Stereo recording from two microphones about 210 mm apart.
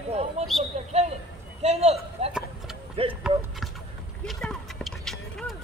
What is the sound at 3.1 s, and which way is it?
Speech, 5° right (ahead or behind).